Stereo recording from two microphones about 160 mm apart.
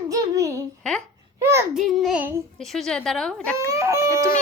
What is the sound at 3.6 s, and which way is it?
Speech, 20° right (ahead or behind).